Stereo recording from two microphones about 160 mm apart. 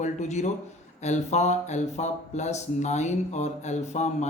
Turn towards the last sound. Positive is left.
turn(degrees=45)  # may be behind; listen again after turning